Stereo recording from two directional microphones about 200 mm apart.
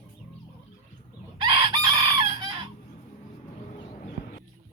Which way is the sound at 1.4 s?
25° right (ahead or behind).